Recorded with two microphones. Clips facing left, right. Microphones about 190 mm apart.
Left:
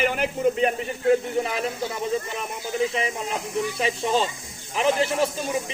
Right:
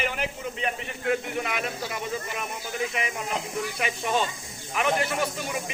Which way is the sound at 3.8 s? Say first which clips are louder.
Left 3 dB; 30° left (ahead or behind).